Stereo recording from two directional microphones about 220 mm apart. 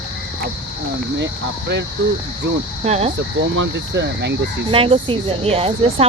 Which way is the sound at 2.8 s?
30° right (ahead or behind).